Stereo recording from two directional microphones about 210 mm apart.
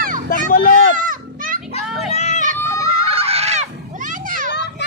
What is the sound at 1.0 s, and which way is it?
Children playing, 40° right (ahead or behind).